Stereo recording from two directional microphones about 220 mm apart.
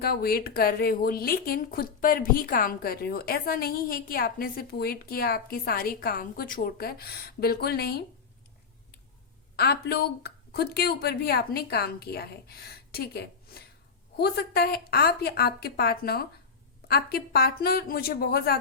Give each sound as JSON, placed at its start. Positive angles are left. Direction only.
{"t": 0.0, "sound": "a woman's voice", "side_deg": 45}
{"t": 9.6, "sound": "a woman's voice", "side_deg": 45}